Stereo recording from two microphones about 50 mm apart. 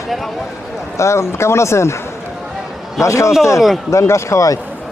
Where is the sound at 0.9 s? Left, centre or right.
Left.